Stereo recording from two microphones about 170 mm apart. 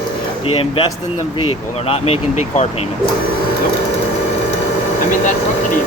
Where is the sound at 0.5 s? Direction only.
30° left (ahead or behind).